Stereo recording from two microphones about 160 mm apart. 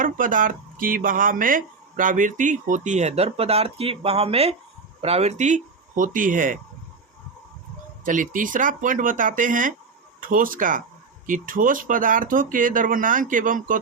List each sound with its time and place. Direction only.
0.0 s speech: 55° right (ahead or behind)
8.0 s speech: 55° right (ahead or behind)